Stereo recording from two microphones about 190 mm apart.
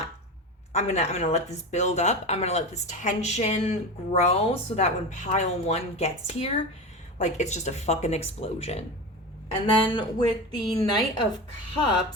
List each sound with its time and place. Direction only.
0.7 s a woman's voice: 35° left (ahead or behind)